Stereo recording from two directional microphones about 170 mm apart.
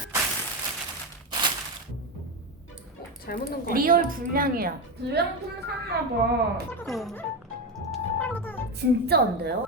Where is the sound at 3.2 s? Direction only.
60° left (ahead or behind).